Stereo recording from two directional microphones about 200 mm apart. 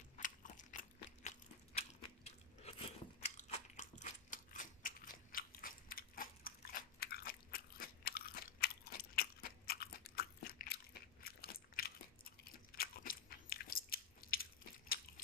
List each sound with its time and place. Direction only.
0.2 s crunch: 40° left (ahead or behind)
1.8 s biting: 30° left (ahead or behind); by 15.2 s 50° left (ahead or behind)